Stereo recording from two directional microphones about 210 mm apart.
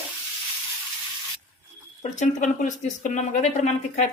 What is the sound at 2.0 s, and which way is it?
Speech, 35° left (ahead or behind).